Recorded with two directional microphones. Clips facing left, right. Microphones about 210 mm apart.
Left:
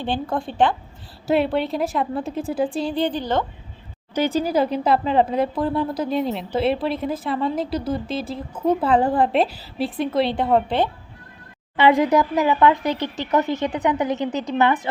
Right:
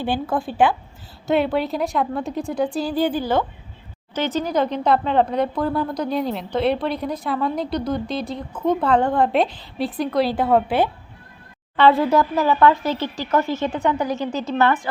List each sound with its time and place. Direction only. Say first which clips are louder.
0.0 s speech: right 2 dB; 5° right (ahead or behind)
4.1 s speech: left 2 dB; 10° left (ahead or behind); by 10.8 s 5° right (ahead or behind)
11.8 s speech: even; 15° left (ahead or behind)